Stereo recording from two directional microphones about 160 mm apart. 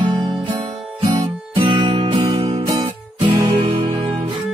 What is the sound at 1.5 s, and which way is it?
Music, 30° right (ahead or behind).